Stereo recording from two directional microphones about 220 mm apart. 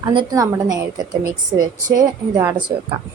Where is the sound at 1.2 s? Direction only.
40° right (ahead or behind).